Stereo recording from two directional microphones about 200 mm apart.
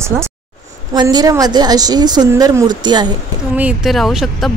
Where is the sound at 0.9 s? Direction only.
20° right (ahead or behind).